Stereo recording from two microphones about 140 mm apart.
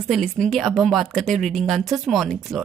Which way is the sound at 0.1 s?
Centre (ahead or behind).